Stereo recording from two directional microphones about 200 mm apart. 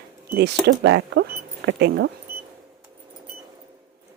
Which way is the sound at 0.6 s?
60° right (ahead or behind).